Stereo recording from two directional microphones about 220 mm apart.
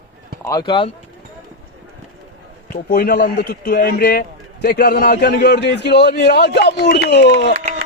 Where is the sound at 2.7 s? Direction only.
45° left (ahead or behind).